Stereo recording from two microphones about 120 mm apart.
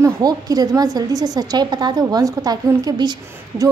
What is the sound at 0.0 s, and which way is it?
A woman's voice, 30° right (ahead or behind).